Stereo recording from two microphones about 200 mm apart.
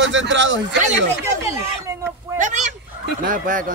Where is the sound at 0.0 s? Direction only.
65° right (ahead or behind).